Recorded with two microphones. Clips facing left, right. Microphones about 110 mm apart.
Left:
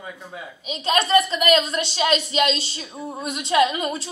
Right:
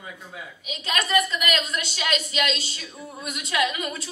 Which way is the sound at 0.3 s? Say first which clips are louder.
Left 5 dB; 30° left (ahead or behind).